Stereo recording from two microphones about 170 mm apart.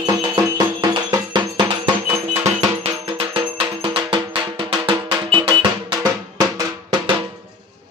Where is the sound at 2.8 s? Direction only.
35° right (ahead or behind).